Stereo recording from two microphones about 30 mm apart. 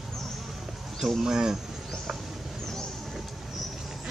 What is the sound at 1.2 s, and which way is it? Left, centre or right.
Speech, centre.